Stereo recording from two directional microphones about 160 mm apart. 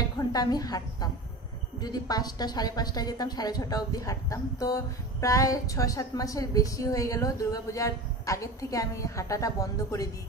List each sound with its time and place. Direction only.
0.2 s a woman's voice: 25° left (ahead or behind)